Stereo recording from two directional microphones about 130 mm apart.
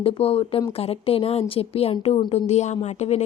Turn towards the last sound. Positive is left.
turn(degrees=60)  # may be behind; listen again after turning